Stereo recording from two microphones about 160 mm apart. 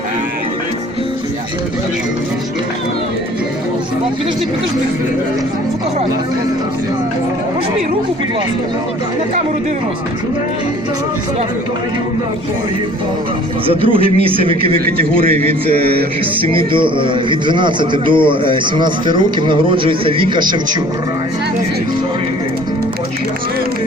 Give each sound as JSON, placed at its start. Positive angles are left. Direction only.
{"t": 13.7, "sound": "speech", "side_deg": -35}